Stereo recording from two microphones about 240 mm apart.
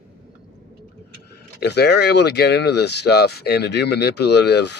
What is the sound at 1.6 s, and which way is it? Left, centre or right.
Speech, left.